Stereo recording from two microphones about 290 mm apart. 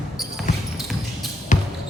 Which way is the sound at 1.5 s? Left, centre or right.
Left.